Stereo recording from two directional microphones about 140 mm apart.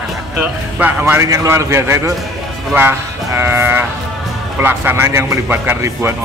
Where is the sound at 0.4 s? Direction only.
10° right (ahead or behind).